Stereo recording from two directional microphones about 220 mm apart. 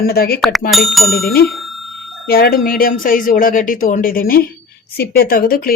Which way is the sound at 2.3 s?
45° left (ahead or behind).